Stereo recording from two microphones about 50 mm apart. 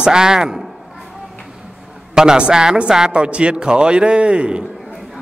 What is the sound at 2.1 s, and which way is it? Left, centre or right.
A man's voice, centre.